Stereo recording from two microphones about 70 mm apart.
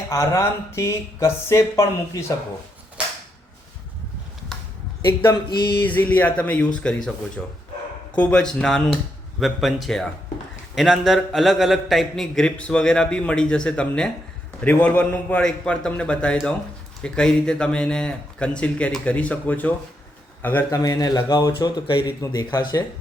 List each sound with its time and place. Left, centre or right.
0.1 s speech: left
5.3 s a sound: left
5.8 s a man's voice: left
20.7 s speech: left